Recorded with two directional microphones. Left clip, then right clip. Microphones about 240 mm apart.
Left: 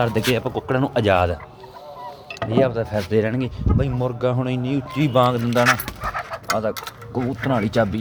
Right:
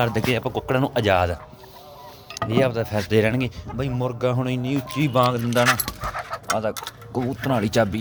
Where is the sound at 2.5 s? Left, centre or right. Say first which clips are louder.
Left 2 dB; centre.